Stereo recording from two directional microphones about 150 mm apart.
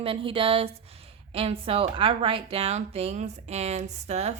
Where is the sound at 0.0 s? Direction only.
35° right (ahead or behind).